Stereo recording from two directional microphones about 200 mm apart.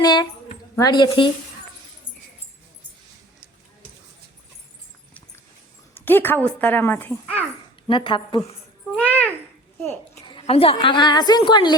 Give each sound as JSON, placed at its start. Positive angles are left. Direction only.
{"t": 0.0, "sound": "a sound", "side_deg": 20}
{"t": 5.9, "sound": "a woman's voice", "side_deg": 10}
{"t": 7.9, "sound": "a woman's voice", "side_deg": 25}
{"t": 9.0, "sound": "babbling", "side_deg": 5}
{"t": 10.2, "sound": "a woman's voice", "side_deg": 25}